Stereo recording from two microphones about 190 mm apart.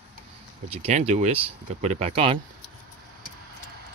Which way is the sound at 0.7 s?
30° right (ahead or behind).